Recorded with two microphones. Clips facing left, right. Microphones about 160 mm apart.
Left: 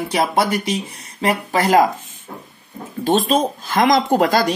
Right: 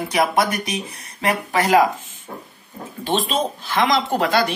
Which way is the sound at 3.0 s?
45° left (ahead or behind).